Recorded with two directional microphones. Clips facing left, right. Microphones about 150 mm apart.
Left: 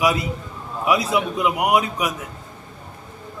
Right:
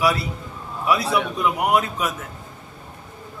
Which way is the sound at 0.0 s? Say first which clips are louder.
Left 1 dB; 15° left (ahead or behind).